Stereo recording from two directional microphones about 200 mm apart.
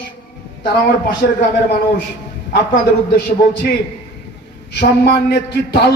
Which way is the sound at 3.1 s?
45° left (ahead or behind).